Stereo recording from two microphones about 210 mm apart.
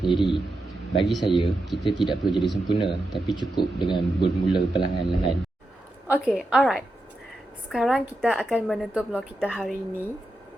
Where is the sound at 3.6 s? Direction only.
20° left (ahead or behind).